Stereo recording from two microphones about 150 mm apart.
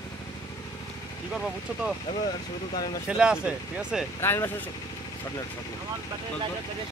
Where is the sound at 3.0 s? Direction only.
5° right (ahead or behind).